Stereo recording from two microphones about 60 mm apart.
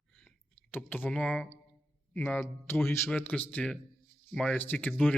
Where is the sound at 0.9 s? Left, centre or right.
Left.